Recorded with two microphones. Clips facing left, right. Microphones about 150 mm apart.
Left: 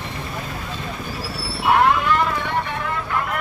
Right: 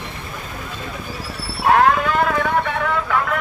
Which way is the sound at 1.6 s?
60° right (ahead or behind).